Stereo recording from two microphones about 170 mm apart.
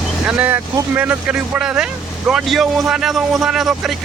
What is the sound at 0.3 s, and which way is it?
Speech, 10° right (ahead or behind).